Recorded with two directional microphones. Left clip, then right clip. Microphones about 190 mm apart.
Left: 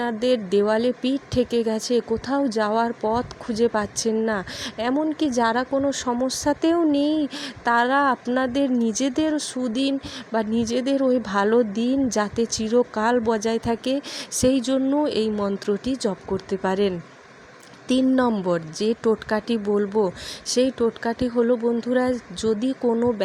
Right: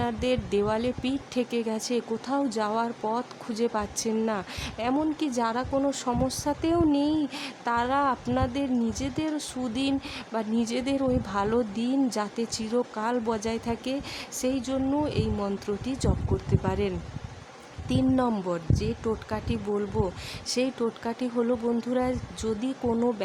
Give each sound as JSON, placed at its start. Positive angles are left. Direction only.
{"t": 0.0, "sound": "speech", "side_deg": 15}